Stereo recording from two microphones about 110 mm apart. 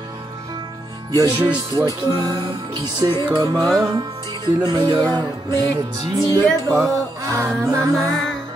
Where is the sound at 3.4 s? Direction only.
30° right (ahead or behind).